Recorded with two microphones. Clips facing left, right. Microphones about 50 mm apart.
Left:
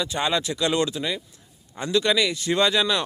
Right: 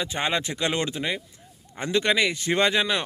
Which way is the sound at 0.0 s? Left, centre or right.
Right.